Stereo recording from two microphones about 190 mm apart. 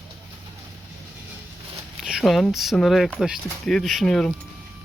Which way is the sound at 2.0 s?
Centre (ahead or behind).